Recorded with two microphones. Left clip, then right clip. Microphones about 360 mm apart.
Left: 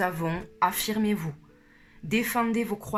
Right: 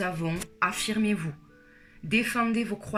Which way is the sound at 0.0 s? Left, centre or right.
Centre.